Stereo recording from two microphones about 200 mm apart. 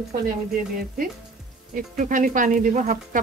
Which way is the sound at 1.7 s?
40° right (ahead or behind).